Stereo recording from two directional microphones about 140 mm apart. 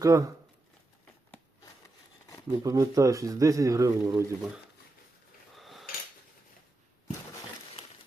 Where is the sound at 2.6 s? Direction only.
25° right (ahead or behind).